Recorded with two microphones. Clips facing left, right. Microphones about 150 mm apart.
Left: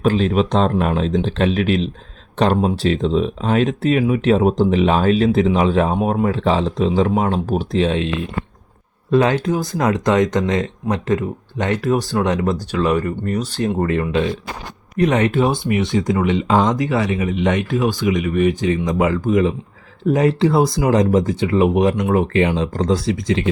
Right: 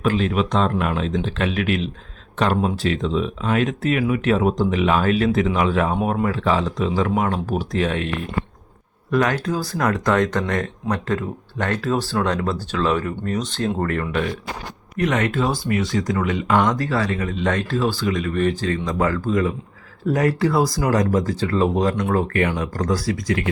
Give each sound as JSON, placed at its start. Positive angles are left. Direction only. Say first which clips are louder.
{"t": 0.0, "sound": "speech", "louder": "left 4 dB", "side_deg": 30}
{"t": 13.8, "sound": "speech", "louder": "left 4 dB", "side_deg": 20}